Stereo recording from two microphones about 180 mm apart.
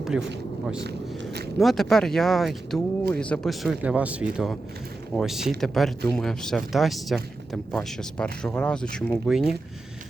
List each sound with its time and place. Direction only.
0.0 s speech: 5° right (ahead or behind)
0.8 s speech: 70° right (ahead or behind)
1.5 s speech: centre (ahead or behind)